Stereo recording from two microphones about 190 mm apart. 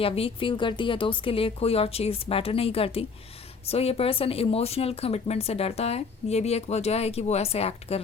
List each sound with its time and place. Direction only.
0.0 s speech: 30° left (ahead or behind)